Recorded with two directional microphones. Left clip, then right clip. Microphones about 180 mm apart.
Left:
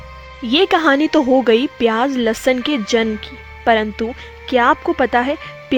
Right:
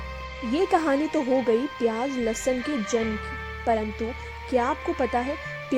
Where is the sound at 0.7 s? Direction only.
25° left (ahead or behind).